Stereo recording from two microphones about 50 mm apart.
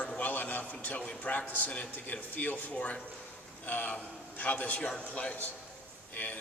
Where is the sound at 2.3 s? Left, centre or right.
Left.